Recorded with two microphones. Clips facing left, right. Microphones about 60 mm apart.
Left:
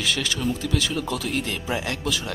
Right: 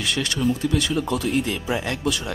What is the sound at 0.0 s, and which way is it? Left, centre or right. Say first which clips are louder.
Speech: right 2 dB; centre.